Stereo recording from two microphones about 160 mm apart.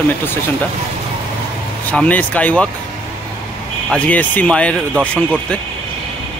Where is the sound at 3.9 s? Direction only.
10° left (ahead or behind).